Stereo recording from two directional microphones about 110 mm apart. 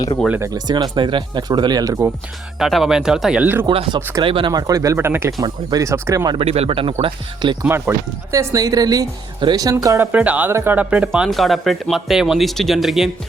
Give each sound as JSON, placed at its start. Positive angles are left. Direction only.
{"t": 0.3, "sound": "speech", "side_deg": -20}
{"t": 0.5, "sound": "speech", "side_deg": -40}
{"t": 2.6, "sound": "speech", "side_deg": 0}
{"t": 4.2, "sound": "speech", "side_deg": -50}
{"t": 4.5, "sound": "speech", "side_deg": -30}
{"t": 4.9, "sound": "speech", "side_deg": -20}
{"t": 6.4, "sound": "speech", "side_deg": -65}
{"t": 7.6, "sound": "speech", "side_deg": -20}
{"t": 9.7, "sound": "speech", "side_deg": -25}
{"t": 10.1, "sound": "speech", "side_deg": -15}
{"t": 11.3, "sound": "speech", "side_deg": 0}